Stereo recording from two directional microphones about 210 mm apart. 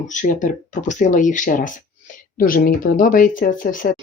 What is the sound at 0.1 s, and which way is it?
Speech, 35° left (ahead or behind).